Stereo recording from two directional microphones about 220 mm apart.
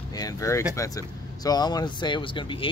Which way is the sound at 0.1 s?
15° left (ahead or behind).